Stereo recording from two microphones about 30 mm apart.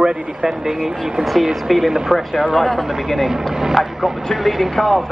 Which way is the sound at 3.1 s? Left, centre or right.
Centre.